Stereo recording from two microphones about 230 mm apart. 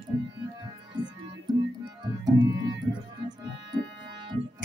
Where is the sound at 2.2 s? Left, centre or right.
Centre.